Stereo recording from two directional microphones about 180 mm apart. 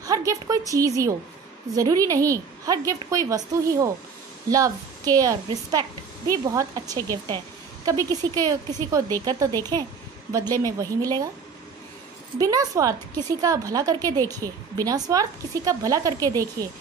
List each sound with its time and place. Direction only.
0.0 s a woman's voice: 20° right (ahead or behind)
12.4 s a woman's voice: 20° right (ahead or behind)